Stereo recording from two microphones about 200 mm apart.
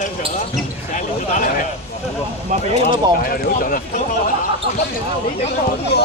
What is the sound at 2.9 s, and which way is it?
Speech, 45° left (ahead or behind).